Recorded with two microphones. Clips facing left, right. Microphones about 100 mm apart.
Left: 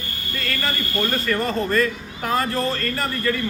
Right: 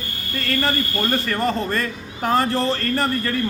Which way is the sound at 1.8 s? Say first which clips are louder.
Left 2 dB; 35° right (ahead or behind).